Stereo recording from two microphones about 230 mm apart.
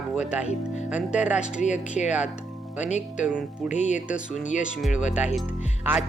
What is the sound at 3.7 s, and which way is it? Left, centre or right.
Speech, left.